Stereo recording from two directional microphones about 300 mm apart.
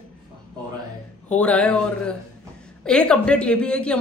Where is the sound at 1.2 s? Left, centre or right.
Centre.